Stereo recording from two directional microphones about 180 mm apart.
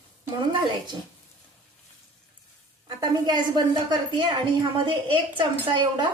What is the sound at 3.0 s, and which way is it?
A woman's voice, 25° right (ahead or behind).